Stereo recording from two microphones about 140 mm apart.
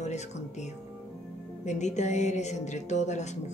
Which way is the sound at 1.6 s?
55° left (ahead or behind).